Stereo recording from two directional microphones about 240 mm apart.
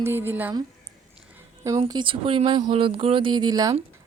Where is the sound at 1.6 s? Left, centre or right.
Centre.